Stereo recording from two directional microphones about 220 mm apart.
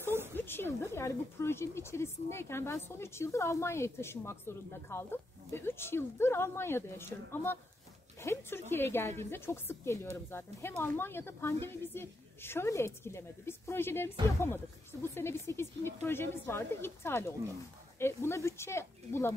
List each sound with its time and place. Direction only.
0.3 s speech: 10° left (ahead or behind)